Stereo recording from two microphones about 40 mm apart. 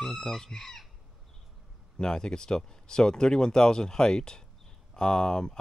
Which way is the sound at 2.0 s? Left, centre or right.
Centre.